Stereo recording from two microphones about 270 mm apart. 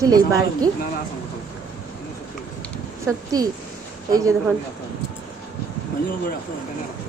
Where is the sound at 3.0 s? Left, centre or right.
Centre.